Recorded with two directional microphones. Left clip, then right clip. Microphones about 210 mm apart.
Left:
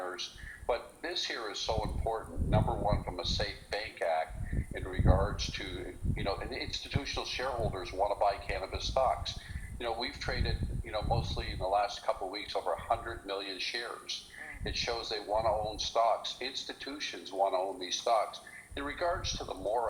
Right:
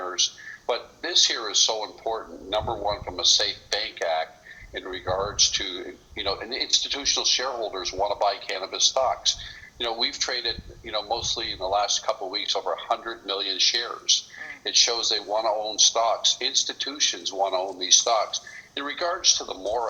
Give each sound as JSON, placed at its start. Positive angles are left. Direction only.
{"t": 0.7, "sound": "a man's voice", "side_deg": -35}